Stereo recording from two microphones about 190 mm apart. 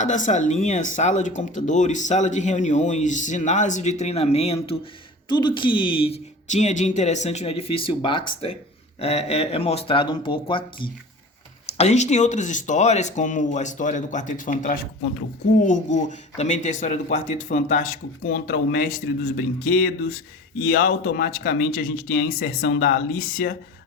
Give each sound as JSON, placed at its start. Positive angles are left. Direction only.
{"t": 0.0, "sound": "speech", "side_deg": 40}
{"t": 11.8, "sound": "speech", "side_deg": 35}